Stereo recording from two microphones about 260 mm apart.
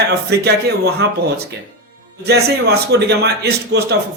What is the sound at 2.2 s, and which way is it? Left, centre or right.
Speech, right.